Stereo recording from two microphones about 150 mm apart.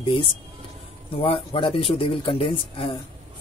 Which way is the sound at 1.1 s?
40° left (ahead or behind).